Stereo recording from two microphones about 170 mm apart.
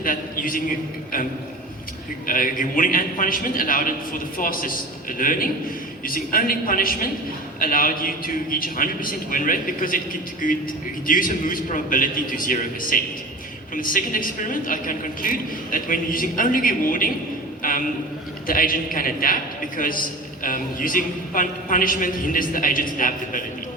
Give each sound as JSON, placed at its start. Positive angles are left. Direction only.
{"t": 0.0, "sound": "a man's voice", "side_deg": 55}
{"t": 2.2, "sound": "a woman's voice", "side_deg": 55}
{"t": 17.6, "sound": "a sound", "side_deg": 55}
{"t": 18.4, "sound": "a man's voice", "side_deg": 55}